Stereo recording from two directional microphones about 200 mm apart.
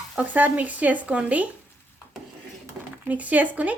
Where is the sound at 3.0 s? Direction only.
10° right (ahead or behind).